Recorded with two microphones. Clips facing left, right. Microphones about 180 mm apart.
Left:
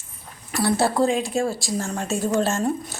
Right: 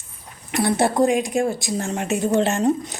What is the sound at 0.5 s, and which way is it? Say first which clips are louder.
Speech: right 2 dB; 20° right (ahead or behind).